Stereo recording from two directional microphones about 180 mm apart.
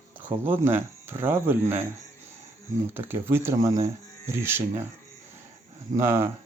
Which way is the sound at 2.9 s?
10° right (ahead or behind).